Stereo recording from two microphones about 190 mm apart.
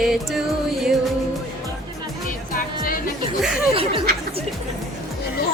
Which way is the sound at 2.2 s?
50° left (ahead or behind).